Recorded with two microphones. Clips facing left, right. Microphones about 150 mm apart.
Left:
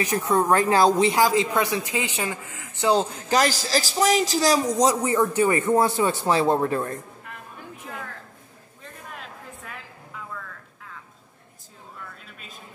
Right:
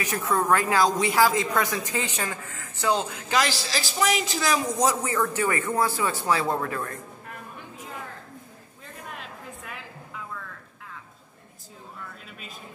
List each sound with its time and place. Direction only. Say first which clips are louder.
0.0 s speech: left 4 dB; 30° left (ahead or behind)
1.9 s speech: left 2 dB; 15° left (ahead or behind)
3.0 s a man's voice: left 4 dB; 35° left (ahead or behind)
4.7 s speech: left 4 dB; 20° left (ahead or behind)